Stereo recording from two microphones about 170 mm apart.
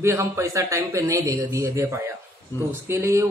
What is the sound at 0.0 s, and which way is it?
A man's voice, 15° right (ahead or behind).